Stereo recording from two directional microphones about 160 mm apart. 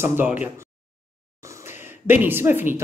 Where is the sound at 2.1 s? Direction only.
10° right (ahead or behind).